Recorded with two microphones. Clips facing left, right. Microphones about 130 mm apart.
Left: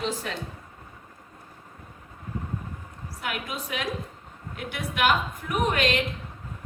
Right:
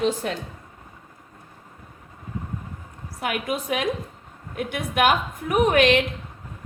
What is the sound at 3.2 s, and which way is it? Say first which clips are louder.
A woman's voice: right 7 dB; 55° right (ahead or behind).